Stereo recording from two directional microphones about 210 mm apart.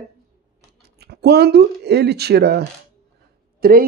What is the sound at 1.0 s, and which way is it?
Speech, 50° right (ahead or behind).